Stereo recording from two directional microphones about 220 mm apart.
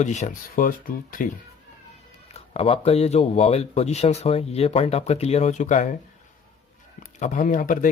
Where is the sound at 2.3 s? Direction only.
25° left (ahead or behind).